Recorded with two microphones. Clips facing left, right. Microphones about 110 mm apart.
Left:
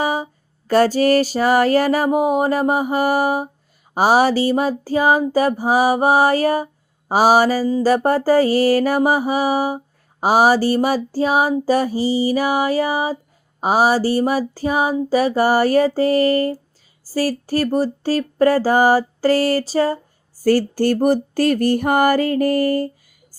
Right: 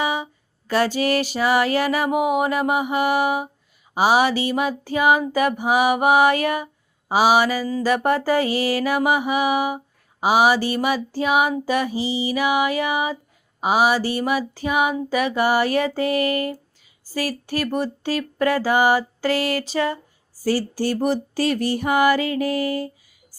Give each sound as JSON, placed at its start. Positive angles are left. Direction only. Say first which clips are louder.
{"t": 0.0, "sound": "a sound", "louder": "left 3 dB", "side_deg": 40}
{"t": 0.7, "sound": "mantra", "louder": "left 6 dB", "side_deg": 40}
{"t": 20.4, "sound": "music", "louder": "left 6 dB", "side_deg": 50}